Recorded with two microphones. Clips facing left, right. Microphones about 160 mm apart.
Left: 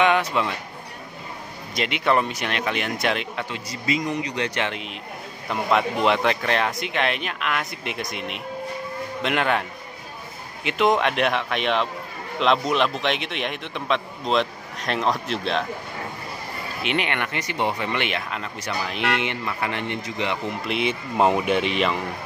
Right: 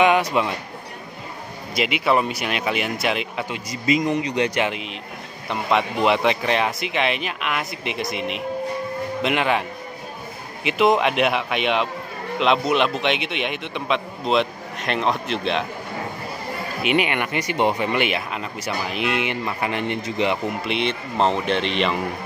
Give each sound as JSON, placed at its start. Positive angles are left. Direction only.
{"t": 0.0, "sound": "speech", "side_deg": -10}
{"t": 1.8, "sound": "speech", "side_deg": -5}
{"t": 3.8, "sound": "speech", "side_deg": -20}
{"t": 5.5, "sound": "a man's voice", "side_deg": 0}
{"t": 16.8, "sound": "speech", "side_deg": -10}
{"t": 19.4, "sound": "speech", "side_deg": -15}
{"t": 20.6, "sound": "speech", "side_deg": 5}